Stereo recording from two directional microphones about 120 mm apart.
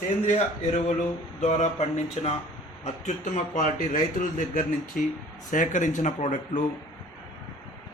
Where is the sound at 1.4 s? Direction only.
65° left (ahead or behind).